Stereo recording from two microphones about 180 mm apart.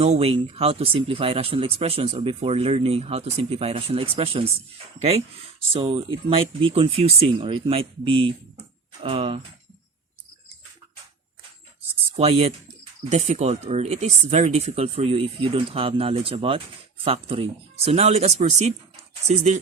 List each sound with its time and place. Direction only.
0.0 s speech: 35° right (ahead or behind)
12.1 s speech: 35° right (ahead or behind)